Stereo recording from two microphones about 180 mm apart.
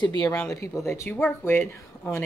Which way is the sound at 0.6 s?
15° left (ahead or behind).